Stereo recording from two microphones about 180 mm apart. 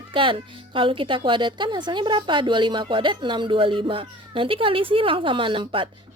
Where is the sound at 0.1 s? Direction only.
30° right (ahead or behind).